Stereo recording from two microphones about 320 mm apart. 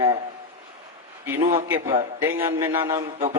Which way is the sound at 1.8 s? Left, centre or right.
Centre.